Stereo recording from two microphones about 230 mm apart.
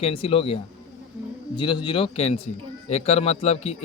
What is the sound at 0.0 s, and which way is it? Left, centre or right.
Speech, left.